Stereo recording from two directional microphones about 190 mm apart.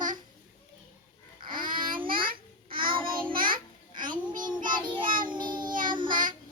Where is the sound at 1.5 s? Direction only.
50° right (ahead or behind).